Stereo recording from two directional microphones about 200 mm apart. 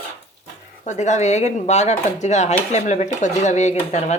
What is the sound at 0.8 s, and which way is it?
Speech, 35° left (ahead or behind).